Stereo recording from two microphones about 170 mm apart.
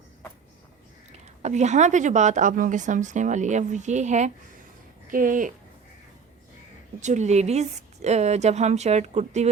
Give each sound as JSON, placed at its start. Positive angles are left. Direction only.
{"t": 1.4, "sound": "a woman's voice", "side_deg": -40}
{"t": 7.0, "sound": "a woman's voice", "side_deg": -45}